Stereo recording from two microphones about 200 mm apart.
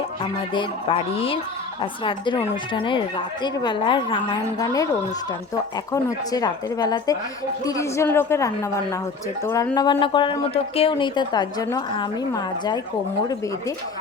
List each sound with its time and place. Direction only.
0.2 s a woman's voice: 25° left (ahead or behind)